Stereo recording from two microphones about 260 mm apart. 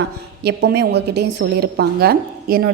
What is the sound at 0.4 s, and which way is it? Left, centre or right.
A woman's voice, right.